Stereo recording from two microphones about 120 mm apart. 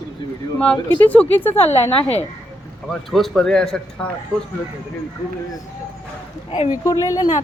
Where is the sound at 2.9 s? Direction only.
Centre (ahead or behind).